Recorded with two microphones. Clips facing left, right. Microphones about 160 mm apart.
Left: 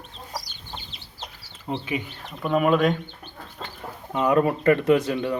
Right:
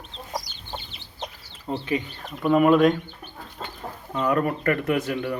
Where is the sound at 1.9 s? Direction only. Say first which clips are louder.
Right 3 dB; 5° left (ahead or behind).